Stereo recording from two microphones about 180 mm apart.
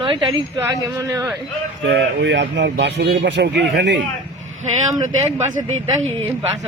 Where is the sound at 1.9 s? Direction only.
75° right (ahead or behind).